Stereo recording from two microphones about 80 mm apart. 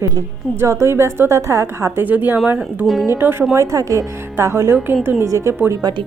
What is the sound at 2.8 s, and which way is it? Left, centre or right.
Speech, centre.